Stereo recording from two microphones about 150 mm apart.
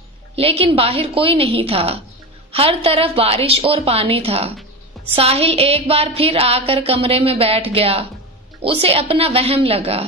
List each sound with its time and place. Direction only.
0.4 s music: 40° right (ahead or behind)